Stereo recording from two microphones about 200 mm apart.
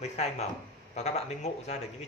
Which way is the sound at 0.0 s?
30° left (ahead or behind).